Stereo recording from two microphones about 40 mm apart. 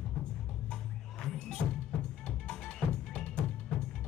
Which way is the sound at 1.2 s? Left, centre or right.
Left.